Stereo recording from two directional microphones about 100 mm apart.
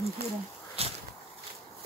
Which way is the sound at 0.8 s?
80° right.